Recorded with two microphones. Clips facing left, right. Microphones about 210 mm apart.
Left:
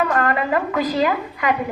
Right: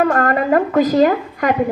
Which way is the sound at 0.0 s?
45° right (ahead or behind).